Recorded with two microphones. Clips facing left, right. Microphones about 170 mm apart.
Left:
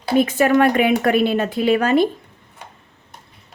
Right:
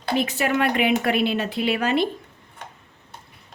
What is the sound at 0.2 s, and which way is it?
A woman's voice, 50° left (ahead or behind).